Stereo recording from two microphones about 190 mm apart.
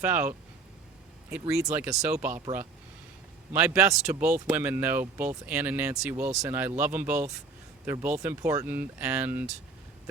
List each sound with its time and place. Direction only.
0.0 s speech: 10° right (ahead or behind)
3.5 s speech: 10° right (ahead or behind)